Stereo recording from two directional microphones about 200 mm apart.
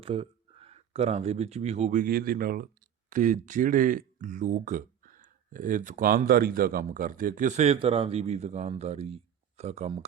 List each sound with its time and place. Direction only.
0.0 s speech: 25° right (ahead or behind)